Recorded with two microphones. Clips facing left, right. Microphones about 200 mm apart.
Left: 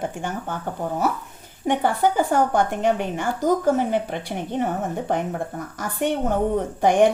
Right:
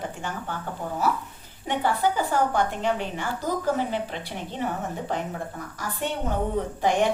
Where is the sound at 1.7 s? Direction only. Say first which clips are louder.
Left 4 dB; 50° left (ahead or behind).